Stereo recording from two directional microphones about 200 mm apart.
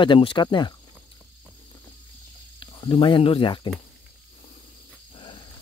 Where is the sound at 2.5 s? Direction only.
25° left (ahead or behind).